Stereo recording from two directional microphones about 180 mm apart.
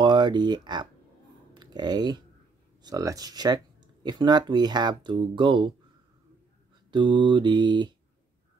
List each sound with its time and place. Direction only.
0.0 s speech: 25° right (ahead or behind)
6.9 s speech: 25° right (ahead or behind)